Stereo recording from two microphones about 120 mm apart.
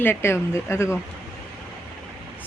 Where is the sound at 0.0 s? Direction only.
20° left (ahead or behind).